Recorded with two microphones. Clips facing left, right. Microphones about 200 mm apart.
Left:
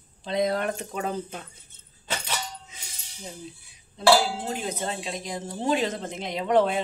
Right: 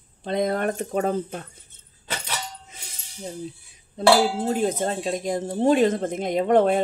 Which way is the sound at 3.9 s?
45° right (ahead or behind).